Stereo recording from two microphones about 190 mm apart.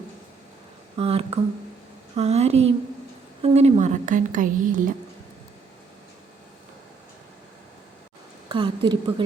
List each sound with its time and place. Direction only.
0.9 s a woman's voice: 30° right (ahead or behind)
8.4 s a woman's voice: 25° right (ahead or behind)